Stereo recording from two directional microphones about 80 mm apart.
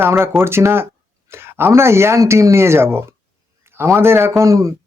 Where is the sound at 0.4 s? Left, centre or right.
Right.